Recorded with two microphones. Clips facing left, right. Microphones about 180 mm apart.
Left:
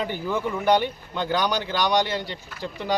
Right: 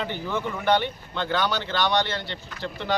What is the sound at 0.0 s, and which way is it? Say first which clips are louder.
Speech: left 2 dB; 10° left (ahead or behind).